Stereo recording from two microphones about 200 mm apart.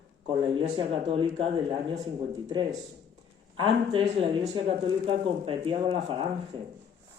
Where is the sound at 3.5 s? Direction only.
25° right (ahead or behind).